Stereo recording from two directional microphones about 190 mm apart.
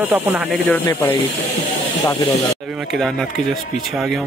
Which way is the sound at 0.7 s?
15° left (ahead or behind).